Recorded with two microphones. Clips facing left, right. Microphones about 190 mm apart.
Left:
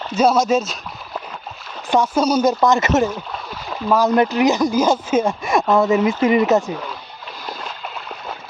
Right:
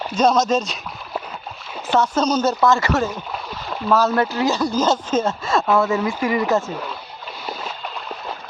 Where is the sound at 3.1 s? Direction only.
5° right (ahead or behind).